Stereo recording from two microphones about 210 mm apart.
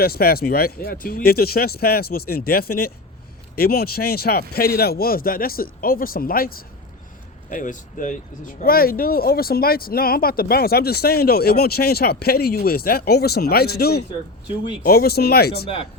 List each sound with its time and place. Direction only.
0.0 s speech: 45° left (ahead or behind)
14.4 s speech: 20° left (ahead or behind)
14.8 s speech: 45° left (ahead or behind)